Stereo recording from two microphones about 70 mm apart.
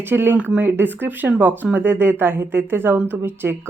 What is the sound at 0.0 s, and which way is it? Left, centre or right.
Speech, right.